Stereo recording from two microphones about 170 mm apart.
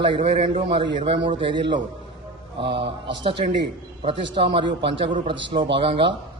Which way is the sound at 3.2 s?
30° right (ahead or behind).